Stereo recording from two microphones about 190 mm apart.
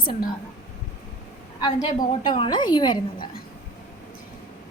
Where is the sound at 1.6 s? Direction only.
25° left (ahead or behind).